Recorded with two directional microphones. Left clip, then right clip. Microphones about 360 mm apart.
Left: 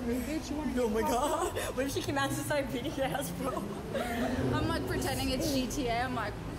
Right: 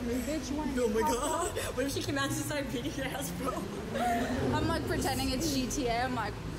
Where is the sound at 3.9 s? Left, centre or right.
Centre.